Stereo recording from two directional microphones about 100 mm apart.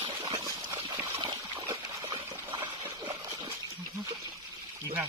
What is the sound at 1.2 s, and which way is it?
Trickle, 55° right (ahead or behind).